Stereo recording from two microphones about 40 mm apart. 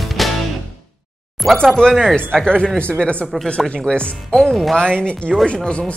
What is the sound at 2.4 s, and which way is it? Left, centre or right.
Speech, left.